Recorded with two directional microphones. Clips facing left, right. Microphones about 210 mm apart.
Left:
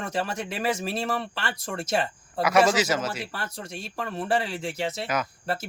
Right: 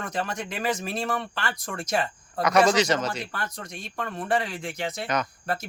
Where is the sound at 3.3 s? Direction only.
30° left (ahead or behind).